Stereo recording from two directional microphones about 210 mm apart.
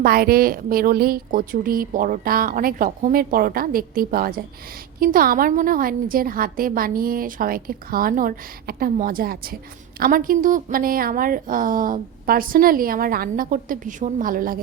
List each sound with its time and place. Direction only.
0.0 s a woman's voice: 45° right (ahead or behind)